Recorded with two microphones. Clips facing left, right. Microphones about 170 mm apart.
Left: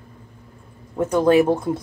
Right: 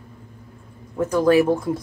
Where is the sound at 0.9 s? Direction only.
25° left (ahead or behind).